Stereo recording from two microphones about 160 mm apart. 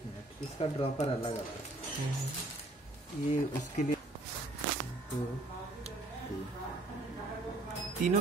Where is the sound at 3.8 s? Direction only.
50° left (ahead or behind).